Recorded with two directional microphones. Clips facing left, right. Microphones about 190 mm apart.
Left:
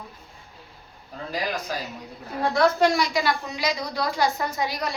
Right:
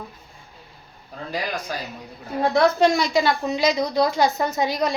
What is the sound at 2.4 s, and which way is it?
A woman's voice, 20° right (ahead or behind).